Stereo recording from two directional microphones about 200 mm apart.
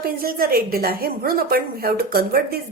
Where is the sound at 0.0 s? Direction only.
45° right (ahead or behind).